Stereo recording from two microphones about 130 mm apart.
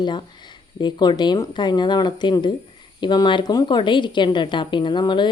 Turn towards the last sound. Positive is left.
turn(degrees=35)  # may be behind; listen again after turning